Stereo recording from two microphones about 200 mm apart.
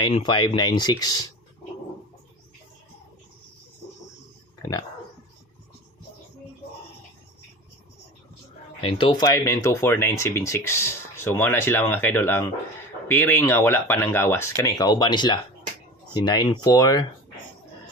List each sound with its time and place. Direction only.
0.0 s speech: 25° left (ahead or behind)
4.6 s speech: 20° left (ahead or behind)
8.8 s speech: 25° left (ahead or behind)